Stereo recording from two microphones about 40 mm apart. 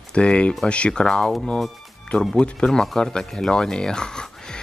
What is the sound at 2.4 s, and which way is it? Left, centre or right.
Speech, centre.